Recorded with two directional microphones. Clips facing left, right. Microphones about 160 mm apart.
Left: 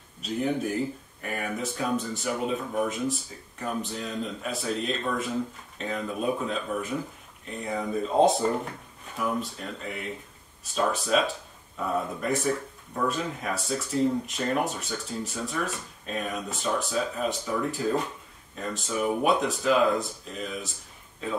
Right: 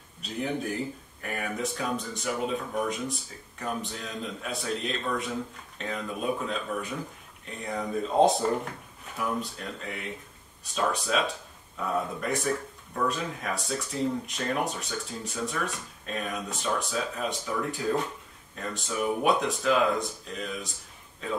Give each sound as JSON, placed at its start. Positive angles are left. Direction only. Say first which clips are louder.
{"t": 0.2, "sound": "speech", "louder": "left 4 dB", "side_deg": 0}